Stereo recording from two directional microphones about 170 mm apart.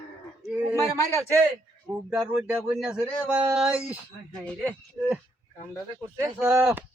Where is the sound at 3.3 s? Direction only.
5° right (ahead or behind).